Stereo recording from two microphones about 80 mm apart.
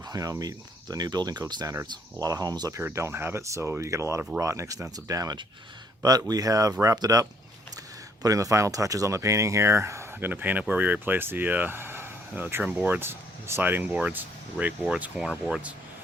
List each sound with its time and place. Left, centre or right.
0.1 s speech: right
2.1 s speech: right
2.7 s speech: right; by 15.2 s centre
15.2 s speech: centre